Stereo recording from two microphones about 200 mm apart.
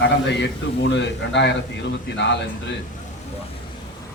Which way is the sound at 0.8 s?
60° left (ahead or behind).